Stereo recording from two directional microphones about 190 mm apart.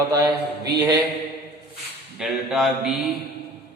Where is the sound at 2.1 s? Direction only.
5° right (ahead or behind).